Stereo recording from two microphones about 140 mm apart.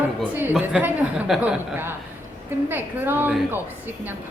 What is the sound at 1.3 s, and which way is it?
A woman's voice, 10° right (ahead or behind).